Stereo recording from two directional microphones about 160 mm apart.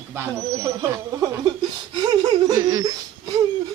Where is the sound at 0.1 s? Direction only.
15° right (ahead or behind).